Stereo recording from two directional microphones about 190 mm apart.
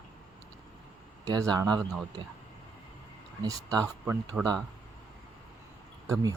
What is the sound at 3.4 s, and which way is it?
Speech, 20° right (ahead or behind).